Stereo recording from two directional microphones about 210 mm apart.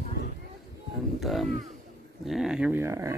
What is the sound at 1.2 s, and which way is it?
Speech, centre (ahead or behind).